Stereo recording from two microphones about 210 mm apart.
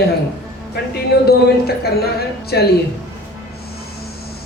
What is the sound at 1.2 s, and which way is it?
Speech, 50° left (ahead or behind).